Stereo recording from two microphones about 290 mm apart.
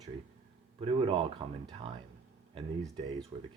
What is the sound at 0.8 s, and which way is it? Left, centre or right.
Speech, centre.